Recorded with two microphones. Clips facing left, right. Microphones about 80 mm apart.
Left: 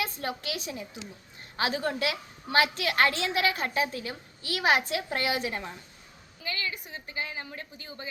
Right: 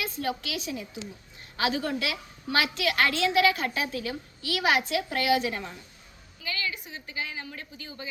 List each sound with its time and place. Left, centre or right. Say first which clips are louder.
0.0 s a woman's voice: right 1 dB; left